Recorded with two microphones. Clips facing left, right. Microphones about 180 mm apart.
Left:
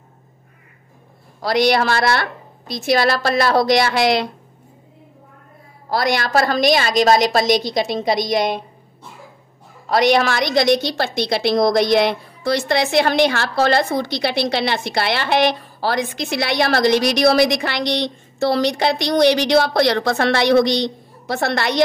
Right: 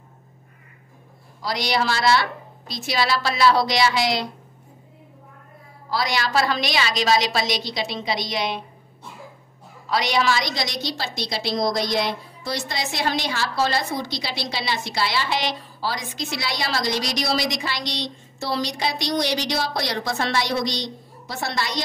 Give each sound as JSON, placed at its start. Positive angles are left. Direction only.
{"t": 1.4, "sound": "a woman's voice", "side_deg": 60}
{"t": 5.9, "sound": "a woman's voice", "side_deg": 55}
{"t": 9.8, "sound": "a woman's voice", "side_deg": 55}